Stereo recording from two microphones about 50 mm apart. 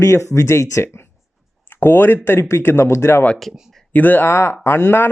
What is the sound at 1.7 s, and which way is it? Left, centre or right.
Speech, left.